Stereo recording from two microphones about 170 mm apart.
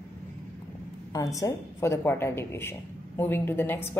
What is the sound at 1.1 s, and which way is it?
A woman's voice, 20° left (ahead or behind).